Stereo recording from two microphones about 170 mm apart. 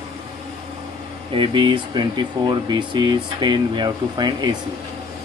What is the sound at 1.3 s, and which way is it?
Speech, 30° right (ahead or behind).